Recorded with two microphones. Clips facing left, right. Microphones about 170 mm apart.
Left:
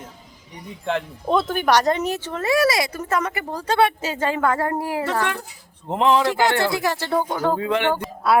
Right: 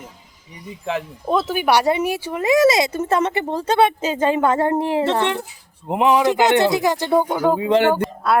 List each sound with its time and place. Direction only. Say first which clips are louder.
0.7 s speech: even; centre (ahead or behind); by 5.4 s 25° right (ahead or behind)
5.9 s speech: right 2 dB; 10° right (ahead or behind)
7.7 s speech: right 7 dB; 35° right (ahead or behind)
8.0 s speech: even; centre (ahead or behind)